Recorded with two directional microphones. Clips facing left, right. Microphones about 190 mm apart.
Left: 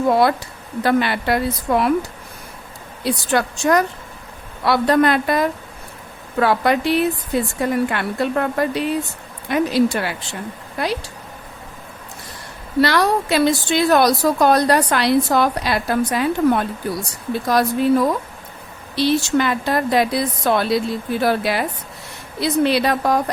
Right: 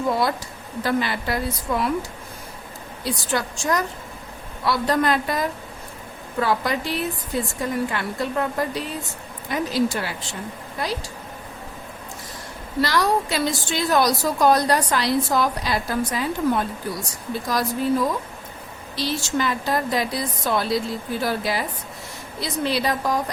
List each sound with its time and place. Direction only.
0.1 s a woman's voice: 65° left (ahead or behind)
12.8 s a woman's voice: 65° left (ahead or behind)